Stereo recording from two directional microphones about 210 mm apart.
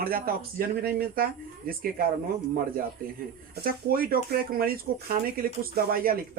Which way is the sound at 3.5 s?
45° right (ahead or behind).